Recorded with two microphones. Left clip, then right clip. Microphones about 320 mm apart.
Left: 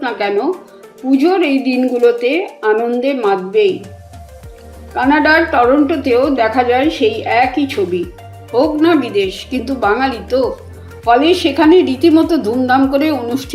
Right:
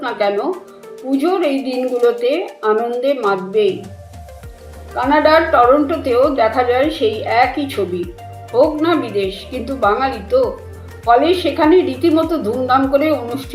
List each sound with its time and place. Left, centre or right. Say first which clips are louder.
0.0 s music: left 1 dB; left
1.2 s a woman's voice: left 2 dB; left
4.9 s a woman's voice: left 1 dB; left